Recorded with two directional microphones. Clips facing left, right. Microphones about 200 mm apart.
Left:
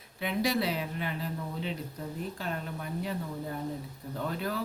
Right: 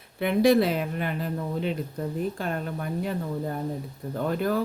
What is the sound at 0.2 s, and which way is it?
Speech, 55° right (ahead or behind).